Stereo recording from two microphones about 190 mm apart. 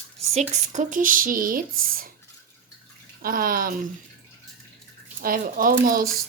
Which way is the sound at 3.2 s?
50° right (ahead or behind).